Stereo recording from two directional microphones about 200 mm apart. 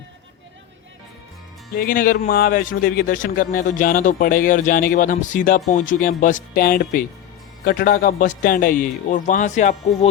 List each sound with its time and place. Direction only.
1.7 s a man's voice: 45° left (ahead or behind)